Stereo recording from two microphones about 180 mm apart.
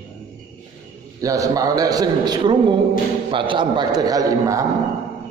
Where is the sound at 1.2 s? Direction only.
20° right (ahead or behind).